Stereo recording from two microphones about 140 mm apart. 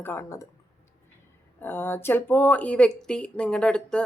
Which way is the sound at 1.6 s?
15° left (ahead or behind).